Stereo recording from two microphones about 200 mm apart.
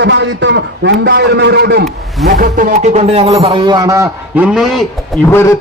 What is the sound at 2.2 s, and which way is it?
Speech, 45° right (ahead or behind).